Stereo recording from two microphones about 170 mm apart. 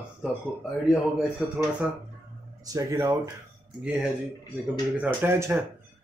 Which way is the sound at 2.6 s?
20° right (ahead or behind).